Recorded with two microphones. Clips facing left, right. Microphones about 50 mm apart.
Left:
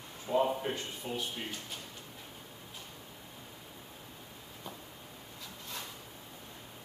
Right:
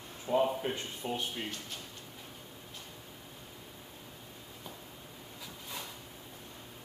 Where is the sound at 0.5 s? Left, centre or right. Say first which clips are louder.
Even; centre.